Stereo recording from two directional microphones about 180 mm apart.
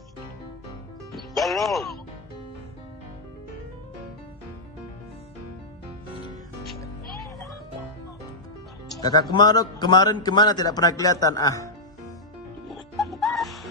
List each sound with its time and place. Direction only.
1.1 s music: centre (ahead or behind)
9.0 s a man's voice: 25° left (ahead or behind)
12.6 s music: centre (ahead or behind)